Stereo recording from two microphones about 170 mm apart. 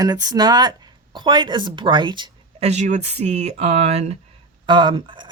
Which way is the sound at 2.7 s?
45° right (ahead or behind).